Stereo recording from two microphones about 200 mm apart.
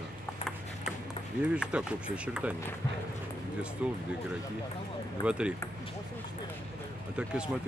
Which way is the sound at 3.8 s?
5° right (ahead or behind).